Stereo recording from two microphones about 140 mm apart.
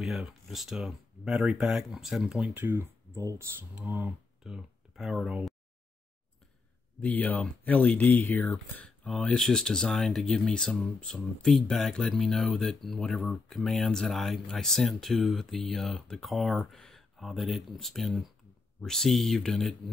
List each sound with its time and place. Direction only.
0.0 s speech: centre (ahead or behind)
7.0 s speech: 10° left (ahead or behind)